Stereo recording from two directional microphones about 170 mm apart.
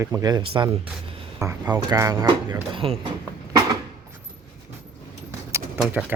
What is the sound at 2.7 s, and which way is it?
Speech, 35° right (ahead or behind).